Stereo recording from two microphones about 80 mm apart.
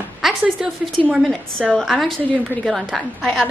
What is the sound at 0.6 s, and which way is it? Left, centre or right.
Speech, centre.